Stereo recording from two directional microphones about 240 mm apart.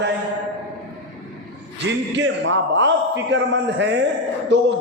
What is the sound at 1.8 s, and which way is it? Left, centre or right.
A man's voice, right.